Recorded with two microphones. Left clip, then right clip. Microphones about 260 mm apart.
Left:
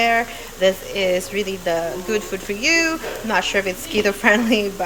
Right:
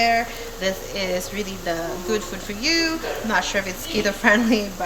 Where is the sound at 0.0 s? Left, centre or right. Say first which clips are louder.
Left 2 dB; centre.